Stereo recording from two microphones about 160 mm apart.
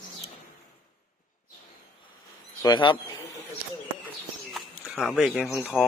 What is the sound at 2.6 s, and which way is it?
Speech, 25° left (ahead or behind).